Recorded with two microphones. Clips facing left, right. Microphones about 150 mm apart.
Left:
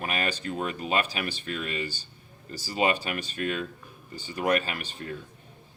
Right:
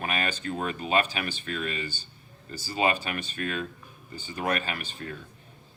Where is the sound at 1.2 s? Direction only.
35° left (ahead or behind).